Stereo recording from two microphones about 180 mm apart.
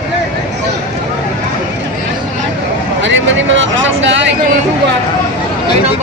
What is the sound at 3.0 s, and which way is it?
Speech, 90° right.